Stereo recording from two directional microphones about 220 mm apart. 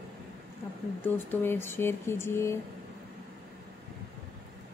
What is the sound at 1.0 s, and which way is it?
A woman's voice, 10° left (ahead or behind).